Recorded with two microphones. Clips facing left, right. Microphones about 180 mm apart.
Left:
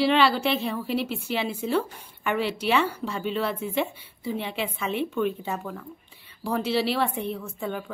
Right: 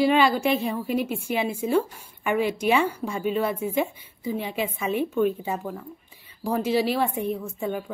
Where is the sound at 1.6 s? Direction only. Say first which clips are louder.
Right 3 dB; 10° right (ahead or behind).